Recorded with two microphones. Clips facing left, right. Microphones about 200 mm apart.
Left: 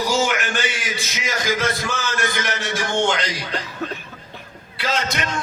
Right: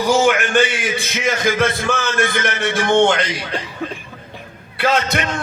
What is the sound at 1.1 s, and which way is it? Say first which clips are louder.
A man's voice: right 5 dB; 55° right (ahead or behind).